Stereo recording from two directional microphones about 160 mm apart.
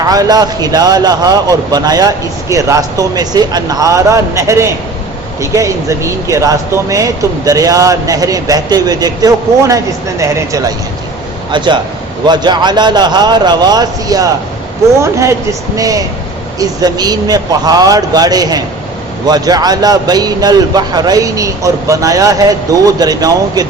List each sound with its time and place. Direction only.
0.1 s speech: 25° right (ahead or behind)